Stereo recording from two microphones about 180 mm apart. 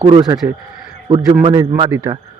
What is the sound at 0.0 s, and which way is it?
Speech, 30° right (ahead or behind).